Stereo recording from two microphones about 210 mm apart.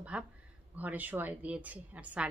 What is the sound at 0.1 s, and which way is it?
A woman's voice, 5° right (ahead or behind).